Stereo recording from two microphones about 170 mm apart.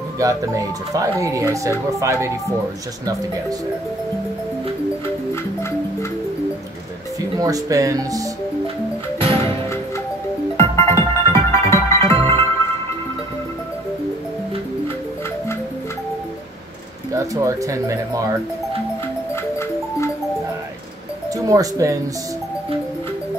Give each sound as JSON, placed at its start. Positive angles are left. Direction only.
{"t": 0.2, "sound": "speech", "side_deg": -20}
{"t": 7.3, "sound": "speech", "side_deg": -20}
{"t": 10.6, "sound": "music", "side_deg": 15}
{"t": 17.1, "sound": "speech", "side_deg": -20}
{"t": 21.5, "sound": "speech", "side_deg": -20}